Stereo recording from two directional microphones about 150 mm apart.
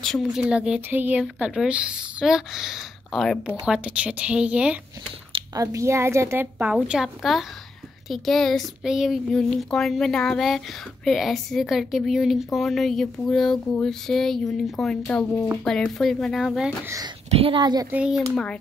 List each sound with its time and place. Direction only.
0.0 s a woman's voice: centre (ahead or behind)
5.3 s a woman's voice: 25° right (ahead or behind); by 16.7 s 5° right (ahead or behind)
16.8 s speech: 20° right (ahead or behind)
17.3 s a woman's voice: 40° right (ahead or behind)
17.9 s a woman's voice: 5° right (ahead or behind)
18.3 s a child's voice: 5° left (ahead or behind)